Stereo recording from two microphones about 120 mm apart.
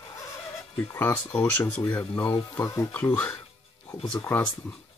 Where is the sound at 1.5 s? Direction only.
25° left (ahead or behind).